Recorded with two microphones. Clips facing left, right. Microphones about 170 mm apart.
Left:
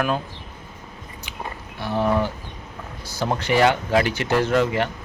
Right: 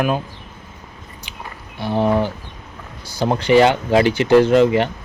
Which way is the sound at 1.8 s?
25° right (ahead or behind).